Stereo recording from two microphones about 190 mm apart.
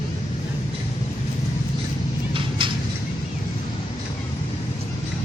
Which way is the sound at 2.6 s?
25° right (ahead or behind).